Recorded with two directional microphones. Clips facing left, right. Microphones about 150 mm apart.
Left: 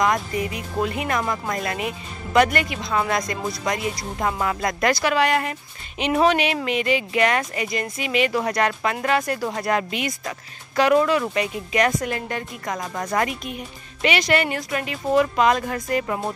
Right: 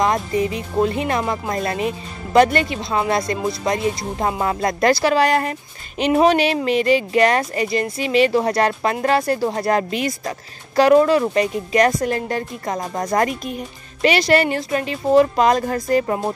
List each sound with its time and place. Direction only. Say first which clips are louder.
0.0 s speech: right 3 dB; 30° right (ahead or behind)